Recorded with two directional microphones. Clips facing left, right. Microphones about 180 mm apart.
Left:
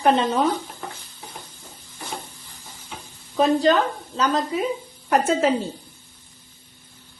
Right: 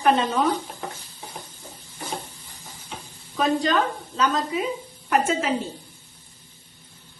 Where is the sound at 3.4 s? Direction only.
30° left (ahead or behind).